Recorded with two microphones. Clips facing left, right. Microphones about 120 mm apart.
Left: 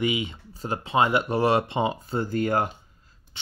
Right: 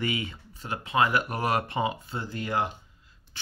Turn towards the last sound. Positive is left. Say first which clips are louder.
# even
turn(degrees=25)  # may be behind; listen again after turning